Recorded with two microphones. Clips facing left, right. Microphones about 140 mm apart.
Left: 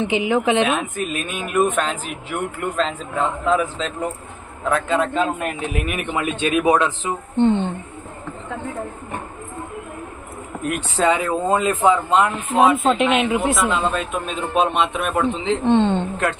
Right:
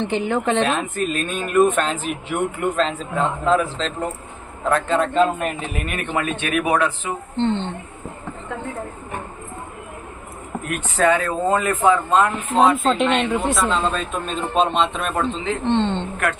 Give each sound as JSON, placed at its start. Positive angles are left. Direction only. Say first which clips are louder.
{"t": 0.0, "sound": "a man's voice", "louder": "left 2 dB", "side_deg": 5}
{"t": 10.9, "sound": "a man's voice", "louder": "right 1 dB", "side_deg": 15}
{"t": 12.5, "sound": "a man's voice", "louder": "left 1 dB", "side_deg": 0}